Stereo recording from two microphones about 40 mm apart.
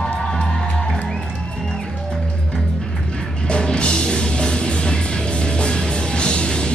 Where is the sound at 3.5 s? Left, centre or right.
Left.